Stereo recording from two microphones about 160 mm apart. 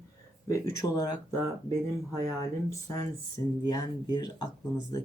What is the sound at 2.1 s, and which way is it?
Speech, 20° left (ahead or behind).